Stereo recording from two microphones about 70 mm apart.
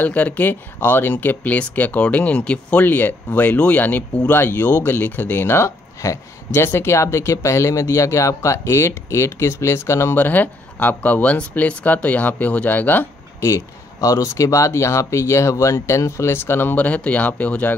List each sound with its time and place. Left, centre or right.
0.0 s speech: left
10.1 s speech: left
14.0 s speech: left
16.7 s speech: left